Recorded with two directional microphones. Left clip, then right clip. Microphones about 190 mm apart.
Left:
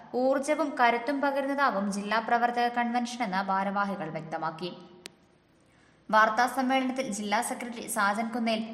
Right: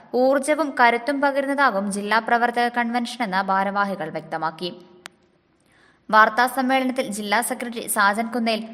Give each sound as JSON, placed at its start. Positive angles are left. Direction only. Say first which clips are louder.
{"t": 0.1, "sound": "a woman's voice", "louder": "right 8 dB", "side_deg": -35}
{"t": 6.1, "sound": "a woman's voice", "louder": "right 7 dB", "side_deg": -35}